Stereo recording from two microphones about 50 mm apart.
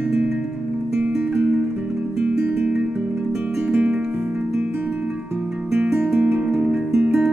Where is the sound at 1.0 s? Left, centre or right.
Right.